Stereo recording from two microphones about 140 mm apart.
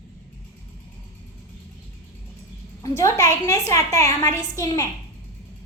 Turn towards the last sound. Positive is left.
turn(degrees=25)  # may be behind; listen again after turning